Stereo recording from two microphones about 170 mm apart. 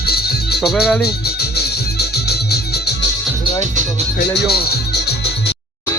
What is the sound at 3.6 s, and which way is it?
Speech, 45° right (ahead or behind).